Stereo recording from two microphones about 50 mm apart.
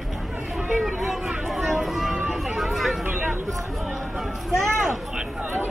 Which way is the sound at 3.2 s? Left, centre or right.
Right.